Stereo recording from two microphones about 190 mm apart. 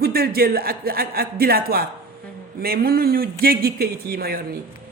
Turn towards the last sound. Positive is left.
turn(degrees=-55)  # may be behind; listen again after turning